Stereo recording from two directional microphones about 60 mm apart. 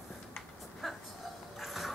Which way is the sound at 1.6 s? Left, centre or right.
Centre.